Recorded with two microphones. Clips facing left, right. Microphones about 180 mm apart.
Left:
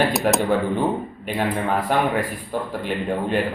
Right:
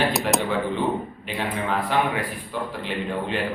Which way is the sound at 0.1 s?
Centre (ahead or behind).